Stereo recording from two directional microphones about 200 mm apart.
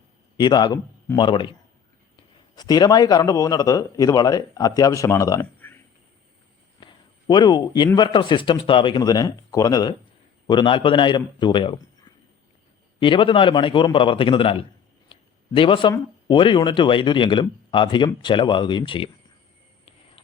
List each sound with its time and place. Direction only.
0.3 s speech: 20° left (ahead or behind)
2.6 s a man's voice: 20° left (ahead or behind)
6.7 s a sound: 25° left (ahead or behind)
7.9 s speech: 25° left (ahead or behind)